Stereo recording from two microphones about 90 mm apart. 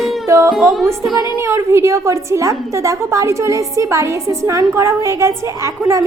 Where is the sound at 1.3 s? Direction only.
30° right (ahead or behind).